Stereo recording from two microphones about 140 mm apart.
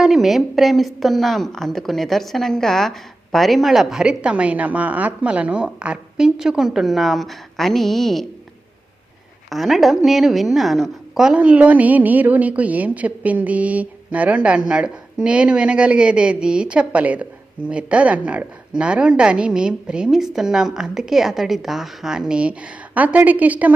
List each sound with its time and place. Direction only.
0.0 s a woman's voice: centre (ahead or behind)
9.5 s a woman's voice: centre (ahead or behind)